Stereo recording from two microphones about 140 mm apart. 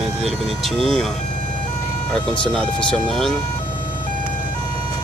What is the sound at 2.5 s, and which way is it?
Speech, 5° left (ahead or behind).